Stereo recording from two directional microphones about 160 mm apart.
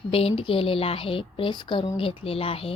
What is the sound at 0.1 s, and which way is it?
A woman's voice, 35° left (ahead or behind).